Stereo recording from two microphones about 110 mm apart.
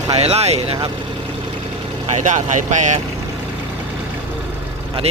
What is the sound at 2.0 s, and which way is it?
Speech, 90° right.